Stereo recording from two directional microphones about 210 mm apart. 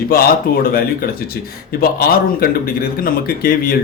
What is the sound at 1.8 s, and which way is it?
Speech, 45° left (ahead or behind).